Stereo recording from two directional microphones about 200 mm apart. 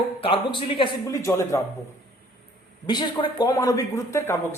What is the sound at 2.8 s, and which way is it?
Speech, 20° left (ahead or behind).